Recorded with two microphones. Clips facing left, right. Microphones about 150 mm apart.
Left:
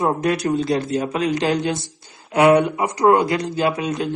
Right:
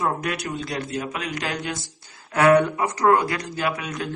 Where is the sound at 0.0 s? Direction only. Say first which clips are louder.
Left 6 dB; 30° left (ahead or behind).